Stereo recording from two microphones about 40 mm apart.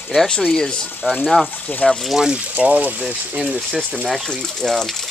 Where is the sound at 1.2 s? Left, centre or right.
Centre.